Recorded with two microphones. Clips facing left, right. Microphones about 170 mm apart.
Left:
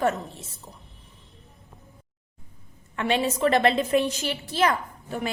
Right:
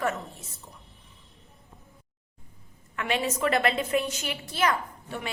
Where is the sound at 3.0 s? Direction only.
30° left (ahead or behind).